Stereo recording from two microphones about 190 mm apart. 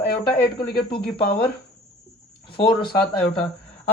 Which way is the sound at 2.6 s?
25° left (ahead or behind).